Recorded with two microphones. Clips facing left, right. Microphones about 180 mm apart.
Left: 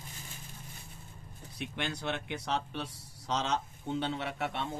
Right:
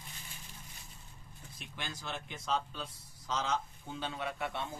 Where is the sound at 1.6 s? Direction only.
65° left (ahead or behind).